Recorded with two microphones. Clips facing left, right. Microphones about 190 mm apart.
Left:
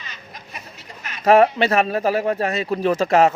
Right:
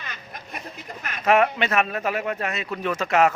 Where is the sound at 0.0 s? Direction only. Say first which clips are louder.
Right 1 dB; 55° right (ahead or behind).